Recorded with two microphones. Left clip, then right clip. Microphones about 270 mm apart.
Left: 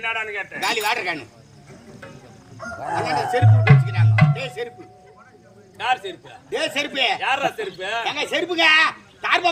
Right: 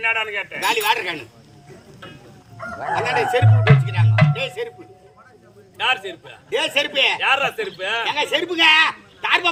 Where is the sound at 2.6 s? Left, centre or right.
Left.